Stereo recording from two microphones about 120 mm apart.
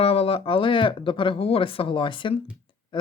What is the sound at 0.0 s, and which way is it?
Speech, 55° left (ahead or behind).